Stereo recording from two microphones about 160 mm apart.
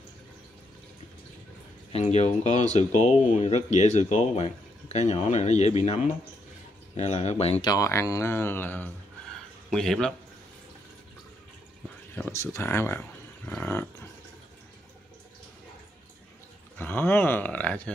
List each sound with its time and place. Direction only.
1.9 s speech: 45° left (ahead or behind)
7.0 s speech: 45° left (ahead or behind)
7.6 s speech: 20° left (ahead or behind); by 10.1 s 5° left (ahead or behind)
12.3 s speech: 15° left (ahead or behind)
16.7 s speech: 10° left (ahead or behind)